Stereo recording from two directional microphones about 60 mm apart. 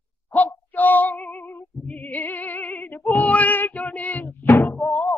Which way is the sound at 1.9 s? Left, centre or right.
Left.